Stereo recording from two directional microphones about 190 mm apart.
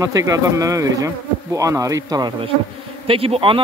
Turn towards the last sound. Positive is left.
turn(degrees=-30)  # may be behind; listen again after turning